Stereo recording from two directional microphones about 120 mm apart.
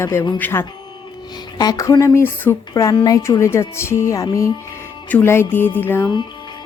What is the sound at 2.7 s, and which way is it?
Speech, 35° left (ahead or behind).